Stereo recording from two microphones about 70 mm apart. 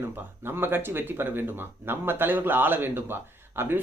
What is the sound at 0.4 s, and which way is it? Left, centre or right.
Speech, right.